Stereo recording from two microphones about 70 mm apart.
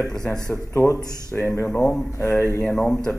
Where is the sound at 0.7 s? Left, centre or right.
Left.